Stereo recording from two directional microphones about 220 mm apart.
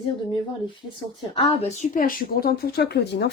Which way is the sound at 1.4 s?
30° left (ahead or behind).